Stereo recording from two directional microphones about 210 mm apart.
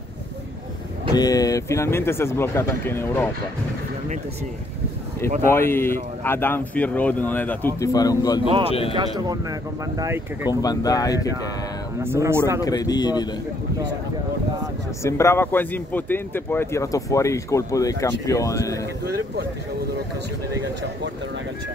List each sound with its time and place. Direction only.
1.1 s speech: 15° left (ahead or behind)
5.5 s speech: 10° left (ahead or behind)
9.3 s speech: 15° right (ahead or behind)
10.5 s speech: 15° left (ahead or behind)
12.0 s speech: 10° right (ahead or behind)
12.6 s speech: 15° left (ahead or behind)
15.0 s speech: 15° left (ahead or behind)